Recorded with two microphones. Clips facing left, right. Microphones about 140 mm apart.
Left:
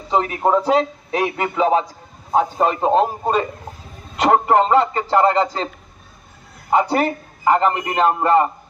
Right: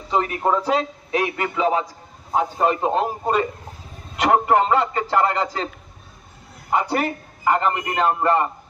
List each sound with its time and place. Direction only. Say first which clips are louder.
0.1 s a man's voice: left 3 dB; 25° left (ahead or behind)
6.7 s a man's voice: left 4 dB; 25° left (ahead or behind)